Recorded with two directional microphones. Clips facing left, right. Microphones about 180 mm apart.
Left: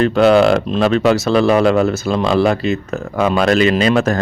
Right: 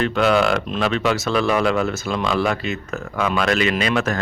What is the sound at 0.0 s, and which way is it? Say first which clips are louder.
Speech: left 7 dB; 35° left (ahead or behind).